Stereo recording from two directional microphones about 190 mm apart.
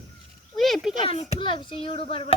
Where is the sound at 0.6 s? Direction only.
Centre (ahead or behind).